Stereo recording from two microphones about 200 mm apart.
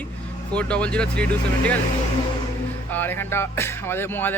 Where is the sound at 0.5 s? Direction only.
5° left (ahead or behind).